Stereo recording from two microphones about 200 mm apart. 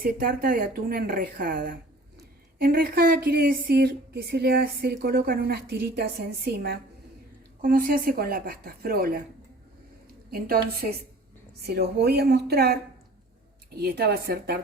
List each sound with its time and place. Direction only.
0.0 s speech: 45° right (ahead or behind)
10.3 s speech: 50° right (ahead or behind)
11.6 s speech: 55° right (ahead or behind)
13.8 s speech: 50° right (ahead or behind)